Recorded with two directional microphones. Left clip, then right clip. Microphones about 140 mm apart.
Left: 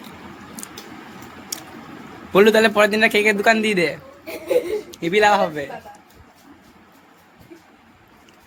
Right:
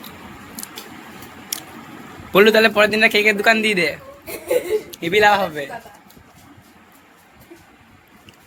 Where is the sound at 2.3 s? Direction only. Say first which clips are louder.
Right 1 dB; 15° left (ahead or behind).